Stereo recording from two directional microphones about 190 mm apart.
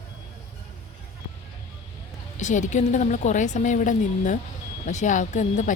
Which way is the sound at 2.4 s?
40° left (ahead or behind).